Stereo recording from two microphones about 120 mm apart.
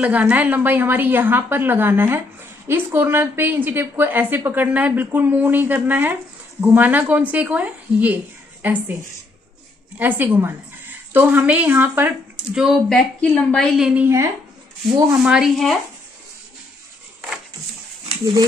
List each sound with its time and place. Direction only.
0.0 s a woman's voice: 15° right (ahead or behind)
9.9 s a woman's voice: 15° right (ahead or behind)
12.5 s a woman's voice: 5° right (ahead or behind)
13.2 s a woman's voice: 10° left (ahead or behind); by 14.0 s 5° right (ahead or behind)
14.0 s speech: 25° right (ahead or behind)
15.2 s a woman's voice: 5° right (ahead or behind)